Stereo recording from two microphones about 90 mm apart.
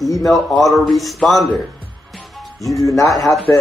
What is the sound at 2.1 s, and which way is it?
Music, centre (ahead or behind).